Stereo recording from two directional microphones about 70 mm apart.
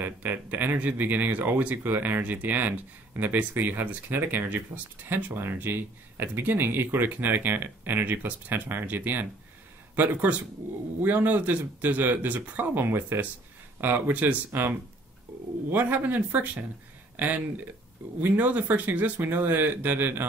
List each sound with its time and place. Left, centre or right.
0.0 s speech: right